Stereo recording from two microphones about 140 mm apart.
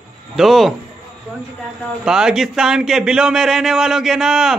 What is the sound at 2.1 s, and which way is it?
A man's voice, 5° right (ahead or behind).